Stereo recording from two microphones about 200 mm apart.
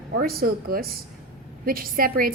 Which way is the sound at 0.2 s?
50° right (ahead or behind).